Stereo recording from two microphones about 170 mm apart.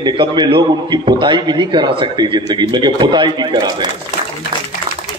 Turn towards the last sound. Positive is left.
turn(degrees=-25)  # may be behind; listen again after turning